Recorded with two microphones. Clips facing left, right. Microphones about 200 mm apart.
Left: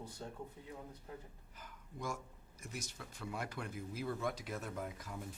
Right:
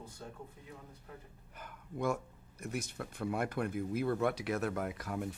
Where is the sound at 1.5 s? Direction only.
60° right (ahead or behind).